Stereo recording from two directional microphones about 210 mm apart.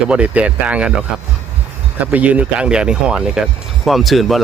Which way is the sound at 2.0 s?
5° right (ahead or behind).